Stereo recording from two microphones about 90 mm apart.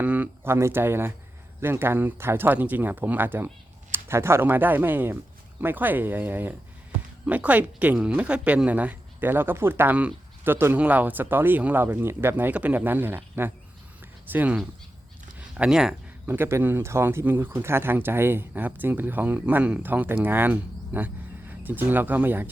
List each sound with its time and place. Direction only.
0.0 s speech: 20° right (ahead or behind)
16.2 s speech: 25° right (ahead or behind)